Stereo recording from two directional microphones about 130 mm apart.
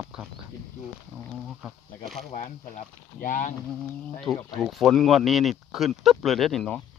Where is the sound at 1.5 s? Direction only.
Centre (ahead or behind).